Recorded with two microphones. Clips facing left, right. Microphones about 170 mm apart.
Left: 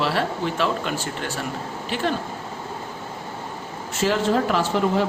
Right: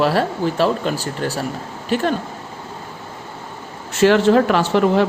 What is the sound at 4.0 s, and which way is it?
A woman's voice, 75° right (ahead or behind).